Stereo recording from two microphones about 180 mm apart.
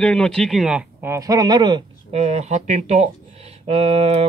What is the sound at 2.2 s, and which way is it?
Speech, 40° right (ahead or behind).